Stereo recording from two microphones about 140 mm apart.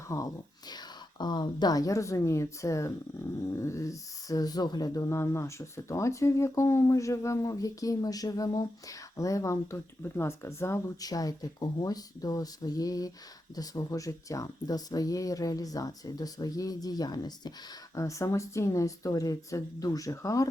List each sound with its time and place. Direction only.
0.1 s speech: 25° left (ahead or behind)